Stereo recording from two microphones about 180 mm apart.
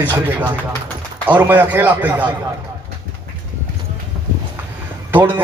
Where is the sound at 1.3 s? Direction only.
10° right (ahead or behind).